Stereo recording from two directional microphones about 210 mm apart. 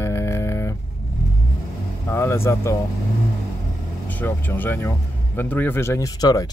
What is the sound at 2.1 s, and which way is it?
Speech, 10° left (ahead or behind).